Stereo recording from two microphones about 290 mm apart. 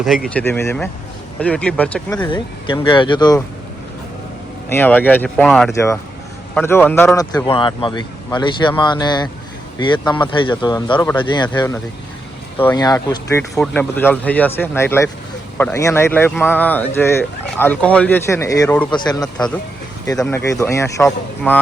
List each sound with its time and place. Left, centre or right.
0.0 s a man's voice: centre
4.7 s a man's voice: centre